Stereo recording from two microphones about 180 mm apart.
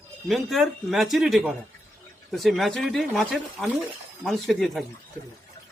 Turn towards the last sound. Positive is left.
turn(degrees=0)  # may be behind; listen again after turning